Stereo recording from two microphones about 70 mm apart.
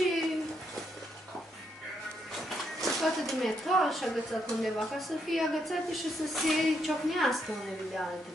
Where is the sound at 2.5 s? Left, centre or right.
Centre.